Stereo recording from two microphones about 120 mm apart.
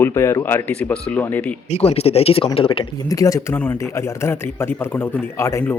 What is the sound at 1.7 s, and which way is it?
Speech, 60° left (ahead or behind).